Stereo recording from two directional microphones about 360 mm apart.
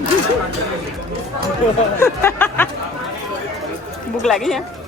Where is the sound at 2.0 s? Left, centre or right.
Centre.